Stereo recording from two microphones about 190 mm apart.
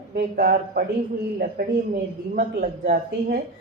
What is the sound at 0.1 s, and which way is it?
A woman's voice, 50° right (ahead or behind).